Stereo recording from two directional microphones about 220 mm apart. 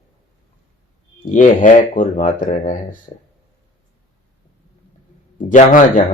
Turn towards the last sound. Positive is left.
turn(degrees=35)  # may be behind; listen again after turning